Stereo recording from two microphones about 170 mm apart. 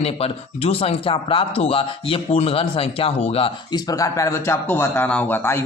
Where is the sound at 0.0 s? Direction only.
35° left (ahead or behind).